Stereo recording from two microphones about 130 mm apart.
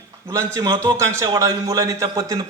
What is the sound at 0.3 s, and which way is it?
A man's voice, 25° right (ahead or behind).